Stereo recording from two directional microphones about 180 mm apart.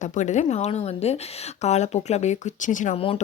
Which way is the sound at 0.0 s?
40° left (ahead or behind).